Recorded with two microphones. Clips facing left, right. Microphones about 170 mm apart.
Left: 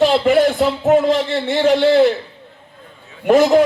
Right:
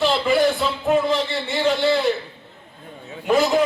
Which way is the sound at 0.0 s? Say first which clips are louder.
Left 5 dB; 70° left (ahead or behind).